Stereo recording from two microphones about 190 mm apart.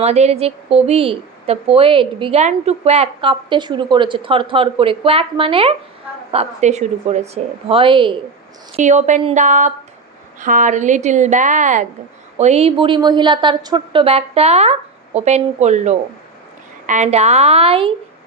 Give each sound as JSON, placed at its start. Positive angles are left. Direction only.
{"t": 0.0, "sound": "a woman's voice", "side_deg": -35}
{"t": 8.7, "sound": "a woman's voice", "side_deg": -40}
{"t": 12.8, "sound": "a woman's voice", "side_deg": -25}